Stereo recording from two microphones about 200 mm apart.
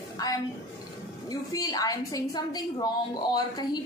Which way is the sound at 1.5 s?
20° left (ahead or behind).